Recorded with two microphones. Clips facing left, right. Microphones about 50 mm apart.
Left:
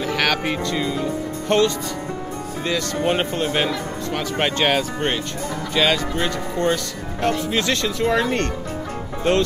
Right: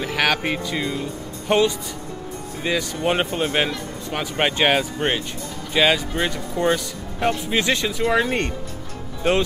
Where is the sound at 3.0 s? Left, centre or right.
Centre.